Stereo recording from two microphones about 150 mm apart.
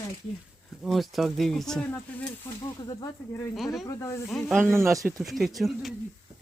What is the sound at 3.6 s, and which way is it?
Speech, centre (ahead or behind).